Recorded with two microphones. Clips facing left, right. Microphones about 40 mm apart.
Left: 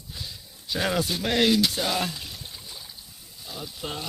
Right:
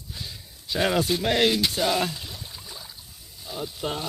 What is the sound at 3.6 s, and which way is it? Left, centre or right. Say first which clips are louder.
Speech: right 4 dB; centre.